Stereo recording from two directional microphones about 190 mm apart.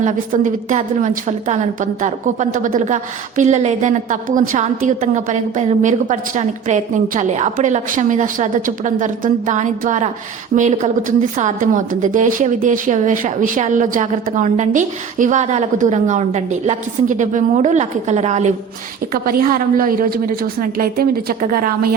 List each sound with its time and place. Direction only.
0.0 s a woman's voice: 40° right (ahead or behind)
19.1 s a woman's voice: 50° right (ahead or behind)